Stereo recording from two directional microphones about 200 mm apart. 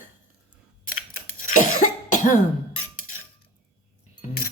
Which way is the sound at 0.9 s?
45° left (ahead or behind).